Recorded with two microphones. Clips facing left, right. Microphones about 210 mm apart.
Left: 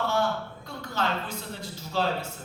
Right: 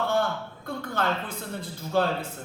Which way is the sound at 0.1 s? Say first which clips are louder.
Right 1 dB; 55° right (ahead or behind).